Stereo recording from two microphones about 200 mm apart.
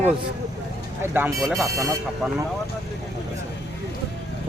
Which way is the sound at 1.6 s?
15° right (ahead or behind).